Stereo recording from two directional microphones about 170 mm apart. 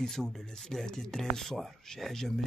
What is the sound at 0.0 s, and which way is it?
Speech, centre (ahead or behind).